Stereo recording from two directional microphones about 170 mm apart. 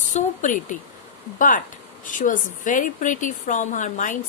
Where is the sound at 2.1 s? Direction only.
50° left (ahead or behind).